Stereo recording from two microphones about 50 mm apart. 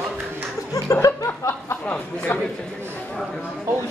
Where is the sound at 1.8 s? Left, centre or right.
Left.